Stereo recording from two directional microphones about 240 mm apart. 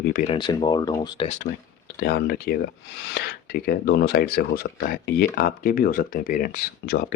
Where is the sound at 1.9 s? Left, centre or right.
Left.